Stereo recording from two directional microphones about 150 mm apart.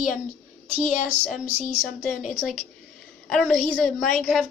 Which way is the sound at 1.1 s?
10° right (ahead or behind).